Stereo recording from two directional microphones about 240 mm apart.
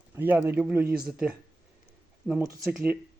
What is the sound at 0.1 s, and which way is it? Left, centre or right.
Speech, centre.